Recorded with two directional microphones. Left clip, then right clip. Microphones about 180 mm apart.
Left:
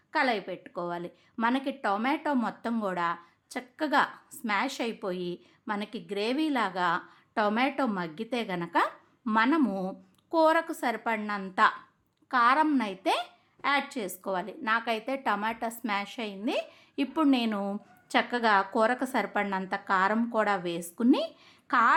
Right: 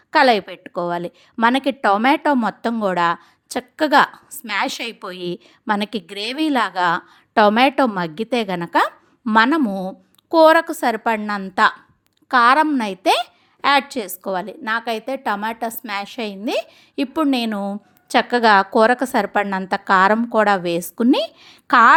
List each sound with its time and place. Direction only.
0.1 s a woman's voice: 50° right (ahead or behind)
9.6 s a woman's voice: 30° right (ahead or behind); by 21.9 s 50° right (ahead or behind)